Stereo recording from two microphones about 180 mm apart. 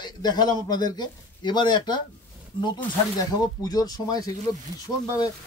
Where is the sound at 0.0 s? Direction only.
25° left (ahead or behind).